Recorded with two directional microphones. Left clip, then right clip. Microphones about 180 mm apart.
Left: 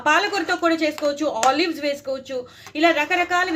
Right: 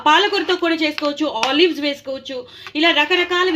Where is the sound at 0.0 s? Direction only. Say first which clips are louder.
Right 4 dB; 30° right (ahead or behind).